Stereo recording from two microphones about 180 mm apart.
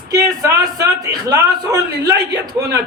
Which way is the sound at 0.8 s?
20° right (ahead or behind).